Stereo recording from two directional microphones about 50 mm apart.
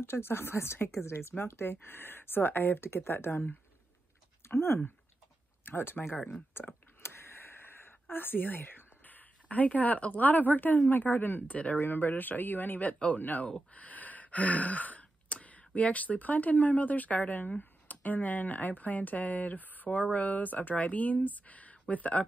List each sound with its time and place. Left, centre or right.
0.0 s speech: left
6.1 s speech: centre
7.0 s a sound: left
10.9 s speech: left
11.4 s speech: left
11.8 s speech: left
13.7 s a sound: left
15.4 s speech: left